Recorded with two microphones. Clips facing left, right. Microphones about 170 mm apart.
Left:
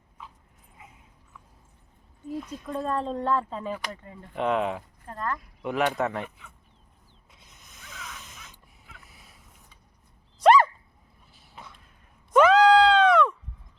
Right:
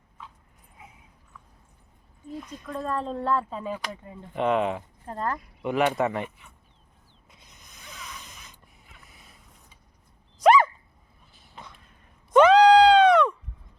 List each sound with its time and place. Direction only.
2.3 s speech: 5° left (ahead or behind)
5.0 s speech: 30° right (ahead or behind)
5.6 s speech: centre (ahead or behind)
7.3 s a sound: centre (ahead or behind)
9.0 s boat: 5° left (ahead or behind)
10.4 s dog: centre (ahead or behind)
11.3 s a sound: 5° left (ahead or behind)